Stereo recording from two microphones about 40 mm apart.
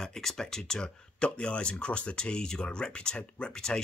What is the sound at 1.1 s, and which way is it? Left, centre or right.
Speech, left.